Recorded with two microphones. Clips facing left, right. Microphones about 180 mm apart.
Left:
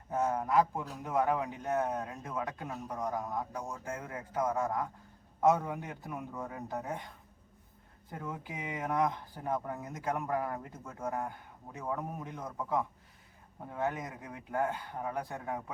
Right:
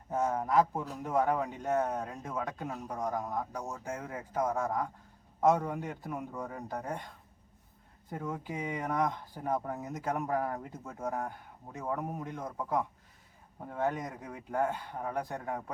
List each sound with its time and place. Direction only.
0.1 s a man's voice: centre (ahead or behind)
8.1 s a man's voice: centre (ahead or behind)